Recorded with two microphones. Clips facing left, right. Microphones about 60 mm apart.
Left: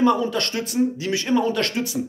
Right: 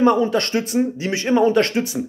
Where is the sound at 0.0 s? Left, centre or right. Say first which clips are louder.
Right 3 dB; right.